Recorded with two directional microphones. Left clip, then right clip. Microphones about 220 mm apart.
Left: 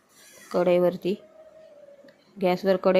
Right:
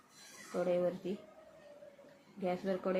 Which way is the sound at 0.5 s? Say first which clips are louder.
Left 12 dB; 45° left (ahead or behind).